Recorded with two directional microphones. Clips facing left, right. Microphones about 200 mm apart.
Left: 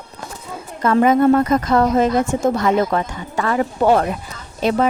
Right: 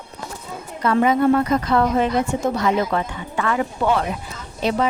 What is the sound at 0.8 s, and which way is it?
A woman's voice, 45° left (ahead or behind).